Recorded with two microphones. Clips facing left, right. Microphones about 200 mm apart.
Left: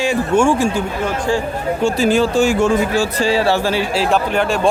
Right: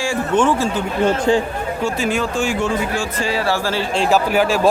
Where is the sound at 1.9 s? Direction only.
35° left (ahead or behind).